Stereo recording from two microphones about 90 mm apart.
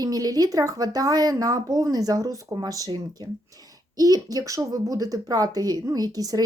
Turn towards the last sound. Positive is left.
turn(degrees=-45)  # may be behind; listen again after turning